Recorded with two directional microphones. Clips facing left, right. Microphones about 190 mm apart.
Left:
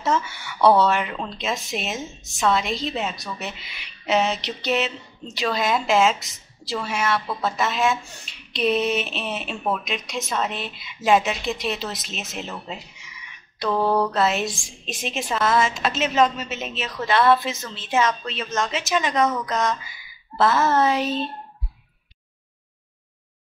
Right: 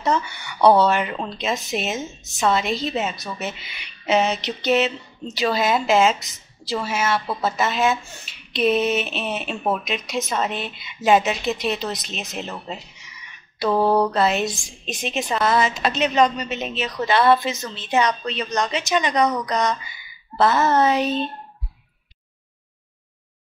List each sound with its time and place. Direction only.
0.0 s a woman's voice: centre (ahead or behind)
13.7 s mantra: 20° right (ahead or behind)
14.1 s a woman's voice: centre (ahead or behind)